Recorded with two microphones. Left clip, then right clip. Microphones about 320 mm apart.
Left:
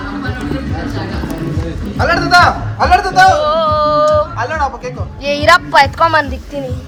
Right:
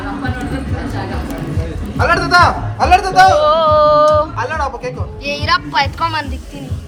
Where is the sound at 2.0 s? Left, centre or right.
Centre.